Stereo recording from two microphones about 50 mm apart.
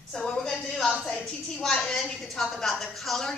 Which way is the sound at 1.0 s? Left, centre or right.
Centre.